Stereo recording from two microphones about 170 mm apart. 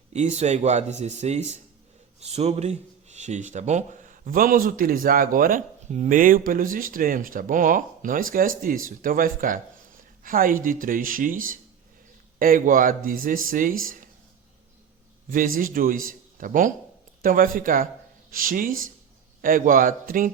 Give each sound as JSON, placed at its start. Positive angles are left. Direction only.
{"t": 0.1, "sound": "speech", "side_deg": -45}
{"t": 15.3, "sound": "speech", "side_deg": -55}